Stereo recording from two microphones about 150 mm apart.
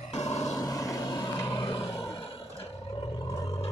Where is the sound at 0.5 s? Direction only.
25° left (ahead or behind).